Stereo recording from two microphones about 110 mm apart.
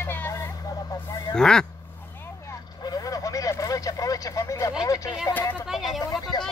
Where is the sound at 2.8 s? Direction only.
35° left (ahead or behind).